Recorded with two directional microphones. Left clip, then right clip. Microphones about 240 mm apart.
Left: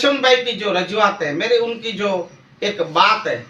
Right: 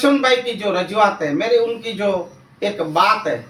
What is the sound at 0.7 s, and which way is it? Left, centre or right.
A man's voice, centre.